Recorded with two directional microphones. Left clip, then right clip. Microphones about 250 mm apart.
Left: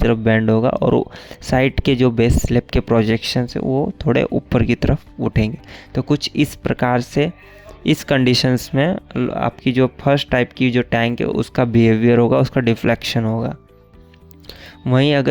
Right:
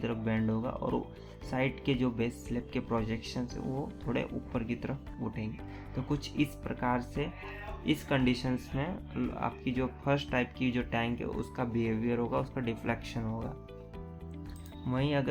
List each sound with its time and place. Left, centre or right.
0.0 s speech: left
14.8 s speech: left